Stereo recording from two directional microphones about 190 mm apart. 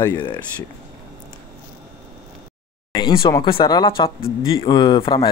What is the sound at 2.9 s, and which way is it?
Speech, 25° left (ahead or behind).